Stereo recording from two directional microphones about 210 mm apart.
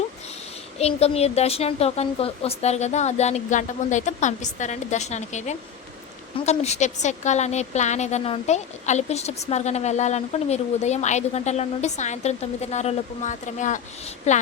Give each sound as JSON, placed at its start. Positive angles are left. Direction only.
{"t": 0.8, "sound": "a woman's voice", "side_deg": 30}